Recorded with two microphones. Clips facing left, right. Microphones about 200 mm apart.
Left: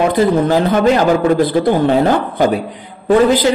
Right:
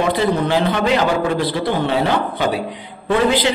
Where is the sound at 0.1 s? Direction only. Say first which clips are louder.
Left 5 dB; 45° left (ahead or behind).